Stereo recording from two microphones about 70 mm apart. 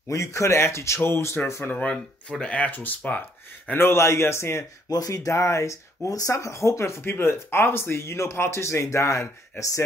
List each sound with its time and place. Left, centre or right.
0.1 s speech: left